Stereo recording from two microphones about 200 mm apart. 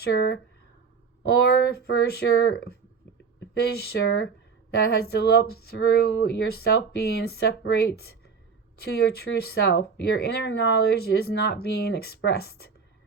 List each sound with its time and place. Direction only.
0.0 s speech: 55° left (ahead or behind)
1.5 s speech: 50° left (ahead or behind)